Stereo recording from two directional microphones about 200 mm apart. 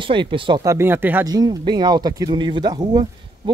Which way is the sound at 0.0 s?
25° right (ahead or behind).